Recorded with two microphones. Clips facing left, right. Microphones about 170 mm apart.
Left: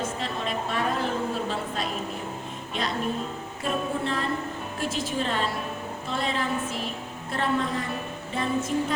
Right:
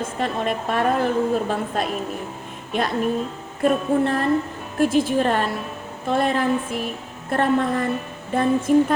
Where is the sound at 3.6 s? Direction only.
55° right (ahead or behind).